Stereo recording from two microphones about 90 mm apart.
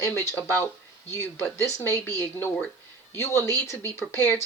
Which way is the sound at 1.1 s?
30° left (ahead or behind).